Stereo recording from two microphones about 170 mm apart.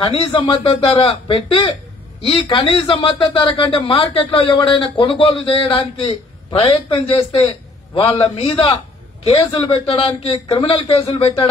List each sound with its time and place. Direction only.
0.0 s speech: 35° left (ahead or behind)